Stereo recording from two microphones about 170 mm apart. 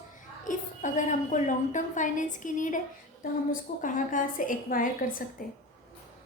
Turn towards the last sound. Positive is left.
turn(degrees=55)  # may be behind; listen again after turning